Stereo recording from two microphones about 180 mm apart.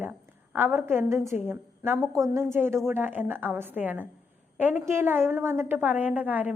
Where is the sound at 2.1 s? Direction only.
20° right (ahead or behind).